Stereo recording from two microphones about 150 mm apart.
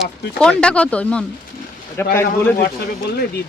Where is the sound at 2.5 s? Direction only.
90° left.